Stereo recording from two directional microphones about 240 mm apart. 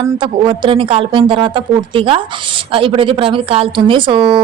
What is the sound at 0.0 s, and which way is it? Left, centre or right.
A woman's voice, right.